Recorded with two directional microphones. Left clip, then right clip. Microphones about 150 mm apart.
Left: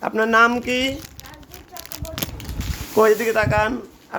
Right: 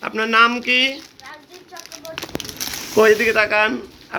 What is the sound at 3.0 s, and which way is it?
Speech, 5° left (ahead or behind).